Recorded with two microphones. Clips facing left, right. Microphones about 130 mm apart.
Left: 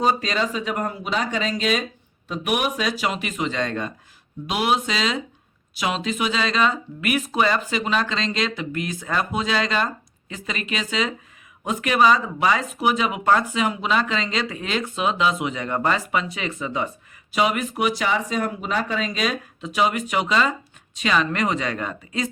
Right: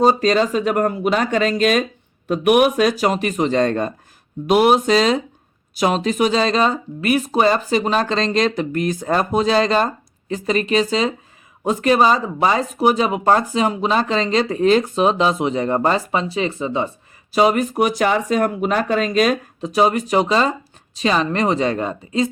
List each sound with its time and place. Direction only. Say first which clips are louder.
0.0 s speech: right 7 dB; 40° right (ahead or behind)